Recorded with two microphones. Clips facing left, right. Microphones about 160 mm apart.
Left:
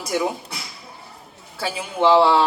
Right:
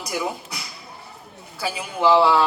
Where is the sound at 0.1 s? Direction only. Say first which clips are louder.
Left 4 dB; centre (ahead or behind).